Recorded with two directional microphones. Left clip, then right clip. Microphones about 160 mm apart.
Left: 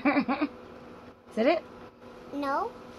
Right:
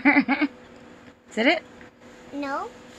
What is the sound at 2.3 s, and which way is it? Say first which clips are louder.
Speech: even; 5° left (ahead or behind).